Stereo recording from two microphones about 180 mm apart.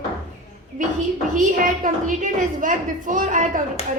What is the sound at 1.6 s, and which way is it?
A woman's voice, 50° right (ahead or behind).